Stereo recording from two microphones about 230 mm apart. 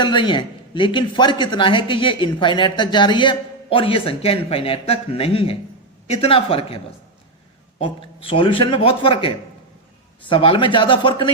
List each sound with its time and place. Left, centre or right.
0.0 s speech: centre
7.8 s speech: left